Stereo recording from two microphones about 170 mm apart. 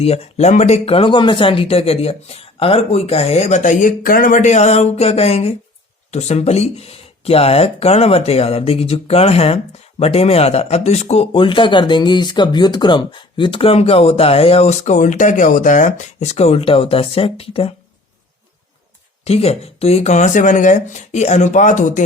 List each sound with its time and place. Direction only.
0.0 s speech: 40° left (ahead or behind)
19.2 s speech: 35° left (ahead or behind)